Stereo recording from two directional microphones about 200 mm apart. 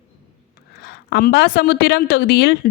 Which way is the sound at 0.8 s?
55° left (ahead or behind).